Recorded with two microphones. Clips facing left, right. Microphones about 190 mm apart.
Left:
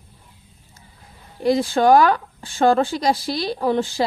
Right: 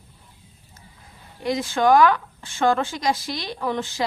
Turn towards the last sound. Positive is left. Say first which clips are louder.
# left 6 dB
turn(degrees=35)  # may be behind; listen again after turning